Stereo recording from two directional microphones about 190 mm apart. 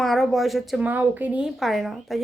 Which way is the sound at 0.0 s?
Centre (ahead or behind).